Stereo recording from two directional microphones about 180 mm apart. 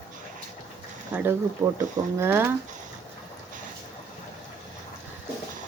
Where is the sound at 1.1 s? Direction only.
10° right (ahead or behind).